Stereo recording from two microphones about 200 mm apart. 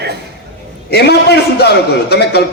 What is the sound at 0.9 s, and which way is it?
Speech, 55° left (ahead or behind).